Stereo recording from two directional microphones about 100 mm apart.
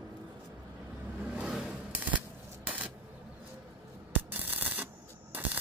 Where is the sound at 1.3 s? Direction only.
10° right (ahead or behind).